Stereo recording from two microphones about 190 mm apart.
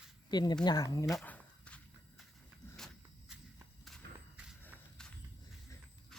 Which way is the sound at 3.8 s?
Centre (ahead or behind).